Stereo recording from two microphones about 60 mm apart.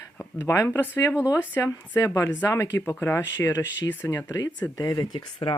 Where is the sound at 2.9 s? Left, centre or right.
Left.